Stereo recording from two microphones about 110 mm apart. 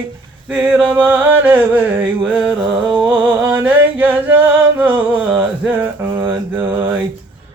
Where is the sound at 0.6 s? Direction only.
10° right (ahead or behind).